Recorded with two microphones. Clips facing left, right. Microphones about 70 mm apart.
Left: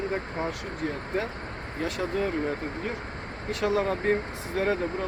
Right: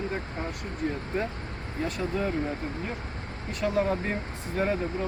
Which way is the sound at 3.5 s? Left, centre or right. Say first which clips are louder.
Left 1 dB; left.